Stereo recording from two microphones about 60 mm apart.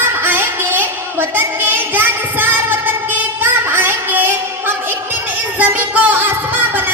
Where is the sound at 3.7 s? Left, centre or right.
Right.